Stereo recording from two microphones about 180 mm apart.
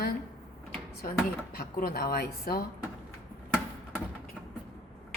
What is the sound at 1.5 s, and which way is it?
A woman's voice, 55° left (ahead or behind).